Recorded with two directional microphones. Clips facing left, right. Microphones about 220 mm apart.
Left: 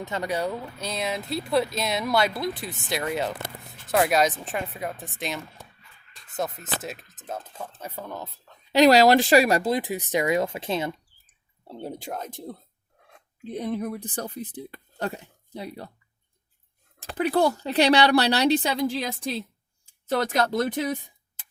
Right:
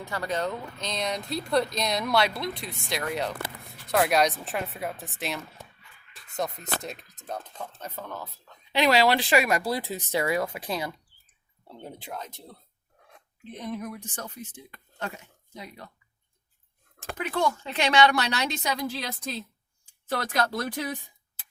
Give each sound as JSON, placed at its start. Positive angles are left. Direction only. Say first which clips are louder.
{"t": 0.0, "sound": "speech", "louder": "left 2 dB", "side_deg": 20}
{"t": 8.7, "sound": "a woman's voice", "louder": "left 6 dB", "side_deg": 40}
{"t": 9.4, "sound": "a woman's voice", "louder": "left 5 dB", "side_deg": 30}
{"t": 9.7, "sound": "speech", "louder": "left 3 dB", "side_deg": 15}
{"t": 11.7, "sound": "speech", "louder": "left 6 dB", "side_deg": 35}
{"t": 13.5, "sound": "a woman's voice", "louder": "left 6 dB", "side_deg": 35}
{"t": 17.0, "sound": "a woman's voice", "louder": "left 5 dB", "side_deg": 35}
{"t": 20.1, "sound": "speech", "louder": "left 4 dB", "side_deg": 25}